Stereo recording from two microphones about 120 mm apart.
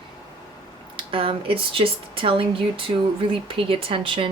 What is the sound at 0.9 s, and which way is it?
Speech, 45° right (ahead or behind).